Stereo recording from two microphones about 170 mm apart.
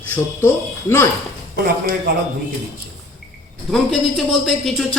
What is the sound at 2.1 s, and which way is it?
Speech, 60° right (ahead or behind).